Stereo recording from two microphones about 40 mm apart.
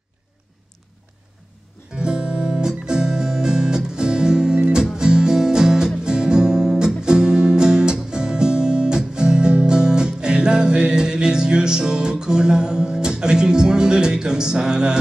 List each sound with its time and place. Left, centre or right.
2.0 s music: centre